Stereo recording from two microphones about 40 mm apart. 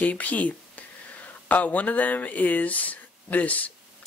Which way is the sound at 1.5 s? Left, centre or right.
Left.